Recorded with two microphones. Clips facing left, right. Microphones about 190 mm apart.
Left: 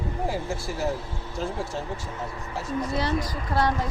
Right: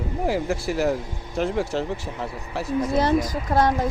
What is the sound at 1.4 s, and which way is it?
Speech, 75° right (ahead or behind).